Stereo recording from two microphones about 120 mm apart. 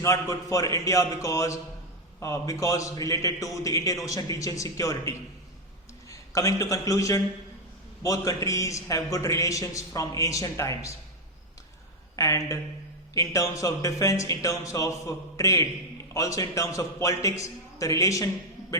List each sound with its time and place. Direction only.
0.0 s a man's voice: 25° left (ahead or behind)
12.1 s a man's voice: 25° left (ahead or behind)